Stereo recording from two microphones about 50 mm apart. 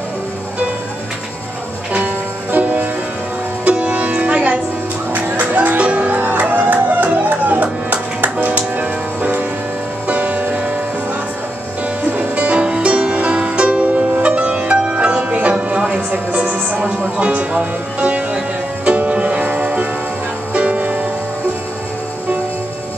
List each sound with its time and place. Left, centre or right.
2.0 s music: right
5.8 s music: right
12.0 s music: right